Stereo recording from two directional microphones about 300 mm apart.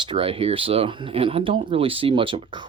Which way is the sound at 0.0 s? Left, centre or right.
Centre.